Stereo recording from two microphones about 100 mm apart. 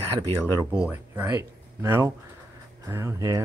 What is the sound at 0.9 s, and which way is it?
Speech, 20° right (ahead or behind).